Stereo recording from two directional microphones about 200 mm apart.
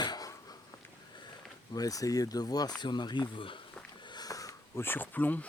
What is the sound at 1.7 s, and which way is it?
Speech, 20° left (ahead or behind).